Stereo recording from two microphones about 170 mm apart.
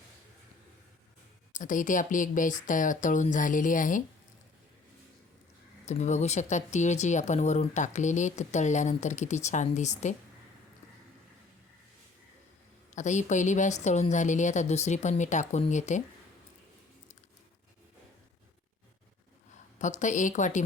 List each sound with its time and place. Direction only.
1.5 s speech: 50° left (ahead or behind)
5.8 s speech: 40° left (ahead or behind)
12.9 s speech: 45° left (ahead or behind)
19.8 s speech: 45° left (ahead or behind)